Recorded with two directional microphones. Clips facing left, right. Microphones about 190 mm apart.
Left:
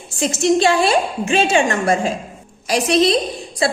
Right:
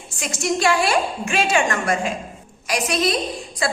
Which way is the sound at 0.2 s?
25° left (ahead or behind).